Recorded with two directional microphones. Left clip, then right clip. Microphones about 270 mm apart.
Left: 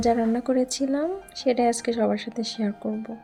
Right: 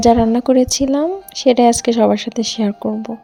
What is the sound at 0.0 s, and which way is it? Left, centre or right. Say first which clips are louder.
Speech: right 10 dB; right.